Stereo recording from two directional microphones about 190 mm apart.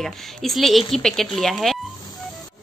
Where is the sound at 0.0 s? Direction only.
Centre (ahead or behind).